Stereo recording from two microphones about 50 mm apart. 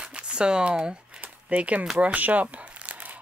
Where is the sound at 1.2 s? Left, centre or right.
Right.